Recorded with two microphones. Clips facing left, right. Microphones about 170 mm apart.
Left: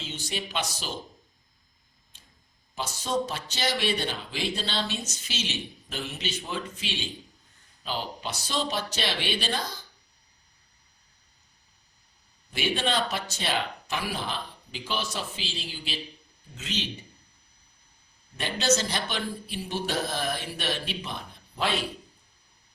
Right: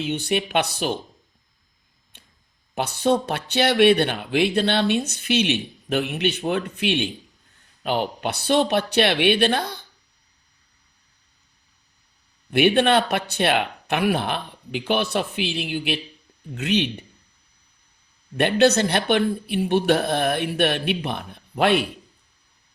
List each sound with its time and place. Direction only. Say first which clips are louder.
0.0 s speech: right 11 dB; 60° right (ahead or behind)
2.1 s a sound: right 5 dB; 60° right (ahead or behind)
2.7 s speech: right 8 dB; 60° right (ahead or behind)
12.5 s speech: right 11 dB; 60° right (ahead or behind)
18.3 s speech: right 9 dB; 60° right (ahead or behind)